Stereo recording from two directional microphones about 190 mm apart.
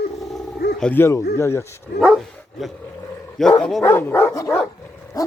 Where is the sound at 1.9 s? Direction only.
Centre (ahead or behind).